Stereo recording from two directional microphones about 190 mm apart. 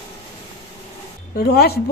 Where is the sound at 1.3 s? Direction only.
55° left (ahead or behind).